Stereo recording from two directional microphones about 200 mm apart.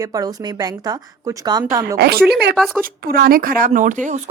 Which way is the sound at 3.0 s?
50° right (ahead or behind).